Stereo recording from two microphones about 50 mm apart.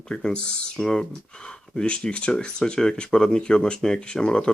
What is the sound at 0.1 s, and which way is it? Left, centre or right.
Speech, centre.